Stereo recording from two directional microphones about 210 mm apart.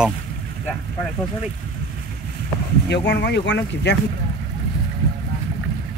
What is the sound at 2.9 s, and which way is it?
Speech, 55° left (ahead or behind).